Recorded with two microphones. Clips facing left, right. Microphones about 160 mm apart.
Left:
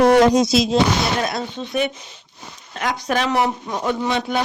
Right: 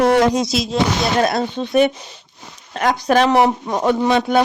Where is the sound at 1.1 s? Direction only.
50° right (ahead or behind).